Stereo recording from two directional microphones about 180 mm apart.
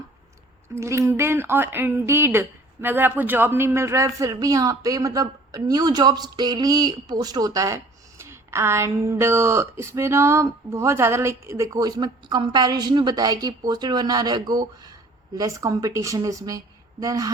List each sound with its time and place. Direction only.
0.8 s a woman's voice: 15° right (ahead or behind)